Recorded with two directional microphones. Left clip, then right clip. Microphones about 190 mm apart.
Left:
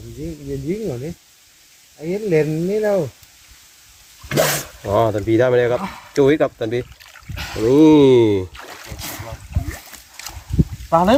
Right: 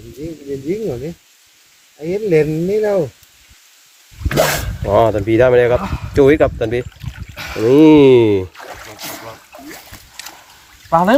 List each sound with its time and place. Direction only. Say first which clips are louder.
2.0 s speech: right 4 dB; 60° right (ahead or behind)
4.3 s speech: right 3 dB; 5° left (ahead or behind)
4.8 s speech: right 5 dB; 10° right (ahead or behind)
7.3 s boat: right 3 dB; 5° right (ahead or behind)
10.8 s speech: right 2 dB; 5° right (ahead or behind)